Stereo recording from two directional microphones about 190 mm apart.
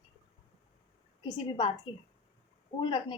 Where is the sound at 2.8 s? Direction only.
25° left (ahead or behind).